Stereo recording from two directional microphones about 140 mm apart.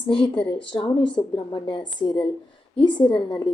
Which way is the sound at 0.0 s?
35° left (ahead or behind).